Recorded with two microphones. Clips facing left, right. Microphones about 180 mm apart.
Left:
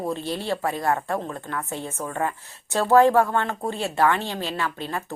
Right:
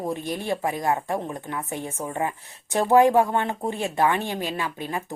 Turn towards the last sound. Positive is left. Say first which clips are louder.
# even
turn(degrees=-15)  # may be behind; listen again after turning